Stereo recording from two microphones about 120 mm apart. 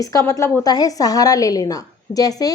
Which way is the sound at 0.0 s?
30° left (ahead or behind).